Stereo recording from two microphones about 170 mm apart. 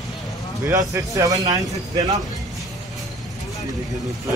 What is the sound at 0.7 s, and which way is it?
Speech, 20° right (ahead or behind).